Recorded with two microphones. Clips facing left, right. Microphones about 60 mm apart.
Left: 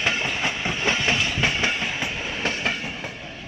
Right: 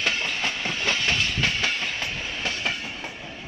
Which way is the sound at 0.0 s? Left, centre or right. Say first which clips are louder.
Left 2 dB; centre.